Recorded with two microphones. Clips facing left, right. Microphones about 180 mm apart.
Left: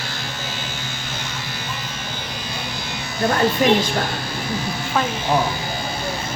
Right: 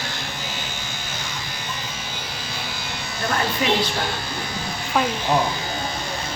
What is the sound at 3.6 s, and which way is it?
Speech, 45° left (ahead or behind).